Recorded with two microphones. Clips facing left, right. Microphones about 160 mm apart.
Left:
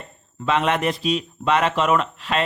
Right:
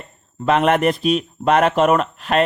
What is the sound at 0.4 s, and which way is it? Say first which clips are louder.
Speech: right 5 dB; 55° right (ahead or behind).